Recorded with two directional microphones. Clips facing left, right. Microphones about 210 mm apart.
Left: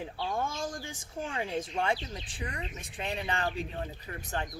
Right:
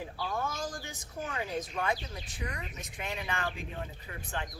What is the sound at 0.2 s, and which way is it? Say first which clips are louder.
Speech: left 2 dB; 25° left (ahead or behind).